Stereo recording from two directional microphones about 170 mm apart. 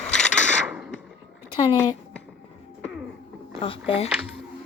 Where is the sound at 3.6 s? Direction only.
35° left (ahead or behind).